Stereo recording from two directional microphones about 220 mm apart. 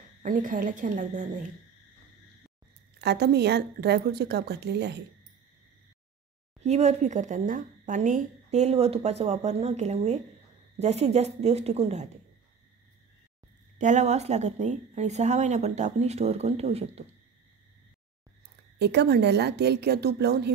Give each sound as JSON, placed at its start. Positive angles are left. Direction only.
{"t": 0.2, "sound": "a woman's voice", "side_deg": -35}
{"t": 3.0, "sound": "a woman's voice", "side_deg": -50}
{"t": 6.6, "sound": "a woman's voice", "side_deg": -30}
{"t": 13.7, "sound": "a woman's voice", "side_deg": -35}
{"t": 18.8, "sound": "a woman's voice", "side_deg": -50}